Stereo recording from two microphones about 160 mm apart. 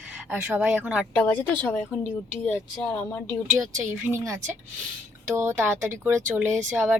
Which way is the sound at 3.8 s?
15° right (ahead or behind).